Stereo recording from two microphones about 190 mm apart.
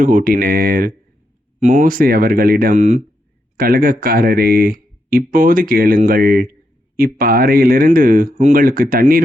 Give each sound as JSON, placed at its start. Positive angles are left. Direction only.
{"t": 0.0, "sound": "speech", "side_deg": -45}